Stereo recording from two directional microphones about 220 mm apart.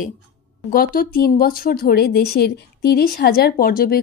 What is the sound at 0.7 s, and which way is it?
Speech, 40° left (ahead or behind).